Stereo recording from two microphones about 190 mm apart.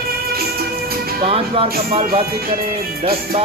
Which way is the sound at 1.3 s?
30° right (ahead or behind).